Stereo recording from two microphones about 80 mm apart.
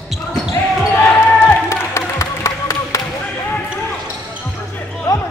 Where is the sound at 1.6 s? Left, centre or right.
Left.